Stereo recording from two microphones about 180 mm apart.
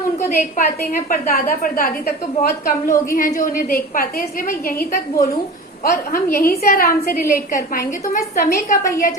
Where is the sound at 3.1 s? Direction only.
50° left (ahead or behind).